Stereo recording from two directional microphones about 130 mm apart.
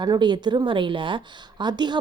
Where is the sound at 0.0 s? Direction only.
35° right (ahead or behind).